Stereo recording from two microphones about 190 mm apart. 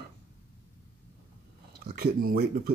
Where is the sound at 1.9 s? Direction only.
55° right (ahead or behind).